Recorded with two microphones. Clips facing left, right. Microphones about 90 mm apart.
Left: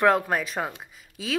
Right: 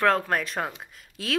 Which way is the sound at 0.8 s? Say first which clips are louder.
Even; centre (ahead or behind).